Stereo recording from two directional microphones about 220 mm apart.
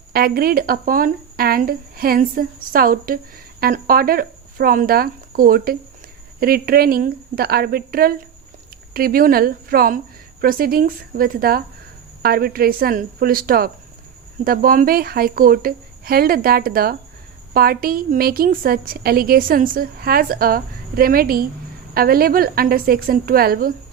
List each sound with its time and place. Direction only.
0.1 s a woman's voice: 45° right (ahead or behind)